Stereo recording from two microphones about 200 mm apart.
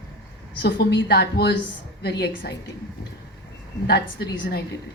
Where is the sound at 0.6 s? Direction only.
60° left (ahead or behind).